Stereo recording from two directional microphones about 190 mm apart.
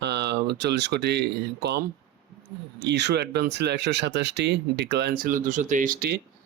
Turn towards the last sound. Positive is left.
turn(degrees=-50)  # may be behind; listen again after turning